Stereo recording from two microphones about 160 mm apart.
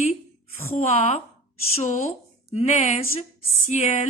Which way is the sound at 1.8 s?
50° left (ahead or behind).